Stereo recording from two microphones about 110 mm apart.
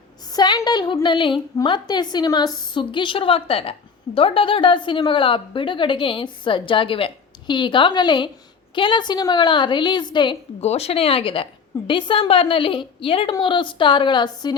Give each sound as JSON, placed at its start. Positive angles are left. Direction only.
{"t": 0.3, "sound": "a woman's voice", "side_deg": 40}
{"t": 10.6, "sound": "a woman's voice", "side_deg": 75}